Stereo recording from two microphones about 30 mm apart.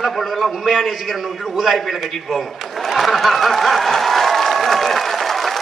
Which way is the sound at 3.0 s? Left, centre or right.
Centre.